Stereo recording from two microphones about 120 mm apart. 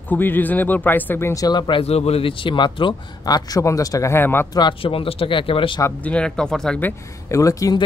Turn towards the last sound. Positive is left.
turn(degrees=25)  # may be behind; listen again after turning